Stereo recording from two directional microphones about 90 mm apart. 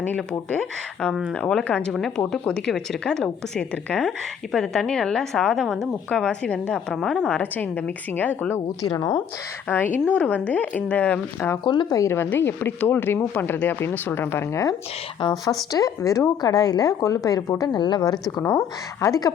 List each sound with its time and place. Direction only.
0.0 s a woman's voice: 15° left (ahead or behind)
8.9 s a woman's voice: 50° left (ahead or behind)
9.6 s a woman's voice: 20° left (ahead or behind)
11.6 s speech: 60° left (ahead or behind)
11.9 s speech: 35° left (ahead or behind)
15.7 s a woman's voice: 40° left (ahead or behind)
17.6 s a woman's voice: 55° left (ahead or behind); by 19.3 s 40° left (ahead or behind)